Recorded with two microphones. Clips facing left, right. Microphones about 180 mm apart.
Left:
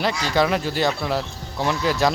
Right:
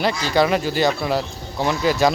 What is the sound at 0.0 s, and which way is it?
Speech, centre (ahead or behind).